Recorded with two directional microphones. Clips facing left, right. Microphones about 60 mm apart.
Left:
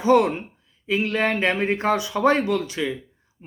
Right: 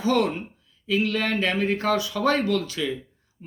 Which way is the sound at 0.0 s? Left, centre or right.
Left.